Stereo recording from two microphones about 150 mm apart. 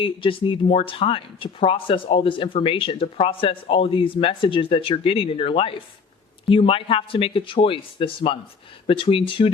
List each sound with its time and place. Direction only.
0.0 s speech: 35° left (ahead or behind)